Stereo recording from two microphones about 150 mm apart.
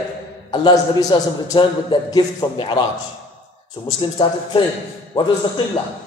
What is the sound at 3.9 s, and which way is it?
A man's voice, 35° left (ahead or behind).